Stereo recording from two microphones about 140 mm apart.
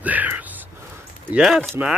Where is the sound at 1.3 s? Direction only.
Centre (ahead or behind).